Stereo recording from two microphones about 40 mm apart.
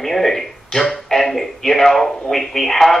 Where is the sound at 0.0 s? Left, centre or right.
Centre.